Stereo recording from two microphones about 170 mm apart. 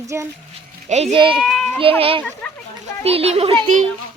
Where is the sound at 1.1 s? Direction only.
30° right (ahead or behind).